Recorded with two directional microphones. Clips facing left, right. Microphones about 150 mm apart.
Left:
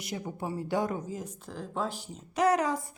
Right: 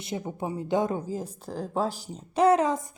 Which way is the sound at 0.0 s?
25° right (ahead or behind).